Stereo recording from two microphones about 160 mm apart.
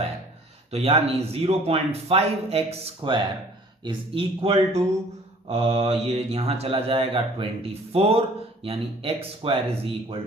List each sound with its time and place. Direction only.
0.7 s speech: 40° right (ahead or behind)